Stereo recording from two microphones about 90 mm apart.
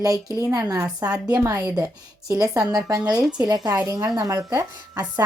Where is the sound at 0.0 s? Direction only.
40° right (ahead or behind).